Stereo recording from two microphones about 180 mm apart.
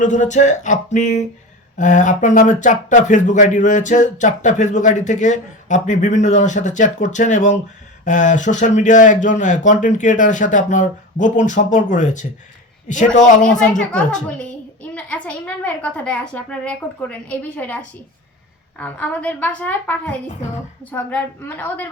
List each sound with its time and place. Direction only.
0.0 s speech: 45° left (ahead or behind)
14.9 s a woman's voice: 5° left (ahead or behind)